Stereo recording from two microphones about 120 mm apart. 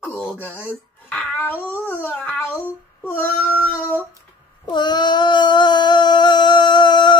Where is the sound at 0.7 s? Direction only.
15° left (ahead or behind).